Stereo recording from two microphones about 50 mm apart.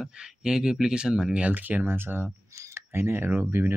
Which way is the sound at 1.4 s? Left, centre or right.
Right.